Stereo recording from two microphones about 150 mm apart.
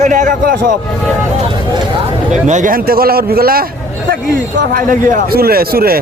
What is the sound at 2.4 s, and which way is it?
A man's voice, 55° right (ahead or behind).